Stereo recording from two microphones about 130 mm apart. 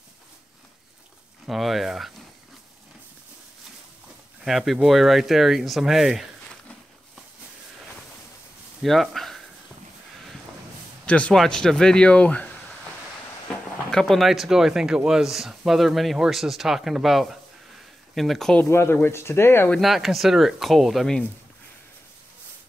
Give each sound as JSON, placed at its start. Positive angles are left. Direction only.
{"t": 1.5, "sound": "speech", "side_deg": 0}
{"t": 4.5, "sound": "speech", "side_deg": 0}
{"t": 8.8, "sound": "speech", "side_deg": 0}
{"t": 11.1, "sound": "speech", "side_deg": 10}
{"t": 13.8, "sound": "speech", "side_deg": 5}
{"t": 18.6, "sound": "speech", "side_deg": 20}
{"t": 19.7, "sound": "speech", "side_deg": 0}